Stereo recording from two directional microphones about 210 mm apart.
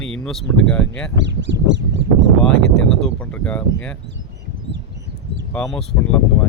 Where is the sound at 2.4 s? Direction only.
Centre (ahead or behind).